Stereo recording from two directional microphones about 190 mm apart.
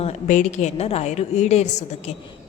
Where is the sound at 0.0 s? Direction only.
40° left (ahead or behind).